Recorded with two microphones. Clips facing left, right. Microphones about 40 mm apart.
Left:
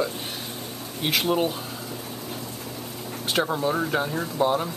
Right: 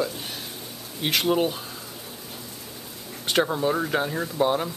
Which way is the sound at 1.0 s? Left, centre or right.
Centre.